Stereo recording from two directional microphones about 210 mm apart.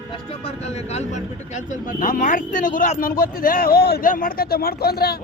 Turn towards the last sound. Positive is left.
turn(degrees=50)  # may be behind; listen again after turning